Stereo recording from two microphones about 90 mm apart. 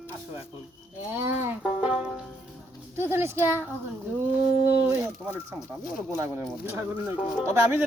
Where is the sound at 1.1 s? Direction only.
25° right (ahead or behind).